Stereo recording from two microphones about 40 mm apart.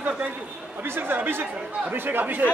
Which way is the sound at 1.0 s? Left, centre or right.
Right.